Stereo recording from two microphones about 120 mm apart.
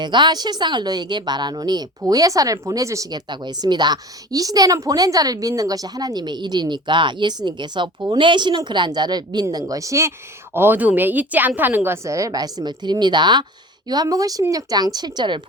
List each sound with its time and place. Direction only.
0.0 s a woman's voice: 40° right (ahead or behind)